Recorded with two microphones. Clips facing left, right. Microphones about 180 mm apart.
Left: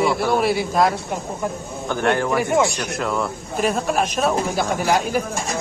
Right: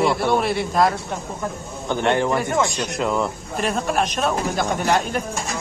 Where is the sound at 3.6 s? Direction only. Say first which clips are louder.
Left 1 dB; centre (ahead or behind).